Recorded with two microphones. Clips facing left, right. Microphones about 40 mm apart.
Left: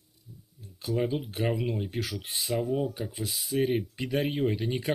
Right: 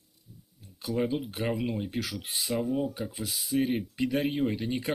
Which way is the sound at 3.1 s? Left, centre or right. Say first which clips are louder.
Left 1 dB; left.